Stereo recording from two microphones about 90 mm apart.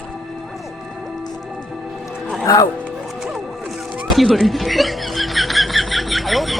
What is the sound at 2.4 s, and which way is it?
Speech, 40° left (ahead or behind).